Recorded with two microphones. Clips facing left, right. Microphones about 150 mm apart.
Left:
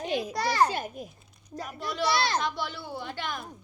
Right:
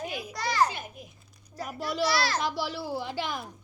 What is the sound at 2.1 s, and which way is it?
Speech, 20° left (ahead or behind).